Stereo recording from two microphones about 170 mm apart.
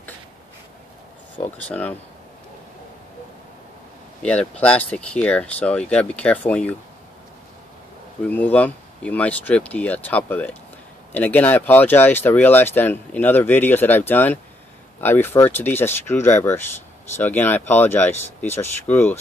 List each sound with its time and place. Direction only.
1.4 s speech: 40° left (ahead or behind)
1.7 s speech: 10° left (ahead or behind)
4.2 s speech: 5° left (ahead or behind)
8.3 s speech: 10° left (ahead or behind)